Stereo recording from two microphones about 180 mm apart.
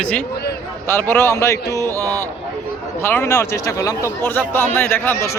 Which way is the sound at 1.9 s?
20° right (ahead or behind).